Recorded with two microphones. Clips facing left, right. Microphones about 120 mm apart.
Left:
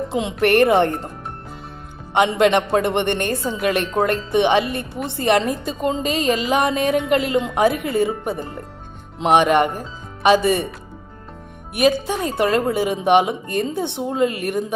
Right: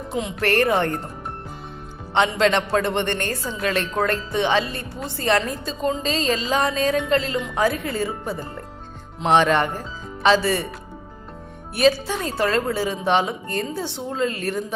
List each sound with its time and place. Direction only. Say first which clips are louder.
0.1 s a woman's voice: left 4 dB; 25° left (ahead or behind)
2.2 s a woman's voice: left 4 dB; 25° left (ahead or behind)
11.7 s speech: left 1 dB; 15° left (ahead or behind)